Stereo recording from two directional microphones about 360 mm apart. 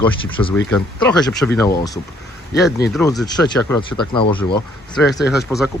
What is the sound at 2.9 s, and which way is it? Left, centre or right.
Speech, centre.